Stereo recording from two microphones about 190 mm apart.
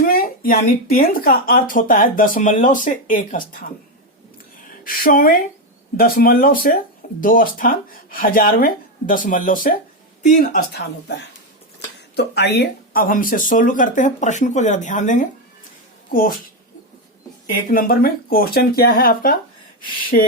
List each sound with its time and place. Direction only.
0.0 s speech: 50° left (ahead or behind)
4.5 s a sound: 45° left (ahead or behind)
6.0 s speech: 50° left (ahead or behind)
10.7 s speech: 60° left (ahead or behind); by 15.3 s 40° left (ahead or behind)
17.7 s speech: 50° left (ahead or behind)